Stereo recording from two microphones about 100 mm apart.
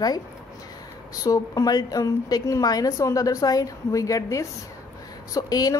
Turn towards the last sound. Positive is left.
turn(degrees=40)  # may be behind; listen again after turning